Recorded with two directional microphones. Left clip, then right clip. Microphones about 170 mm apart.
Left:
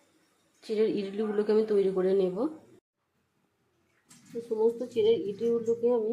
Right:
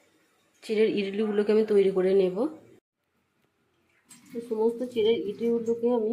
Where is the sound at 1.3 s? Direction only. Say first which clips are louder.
Right 3 dB; 10° right (ahead or behind).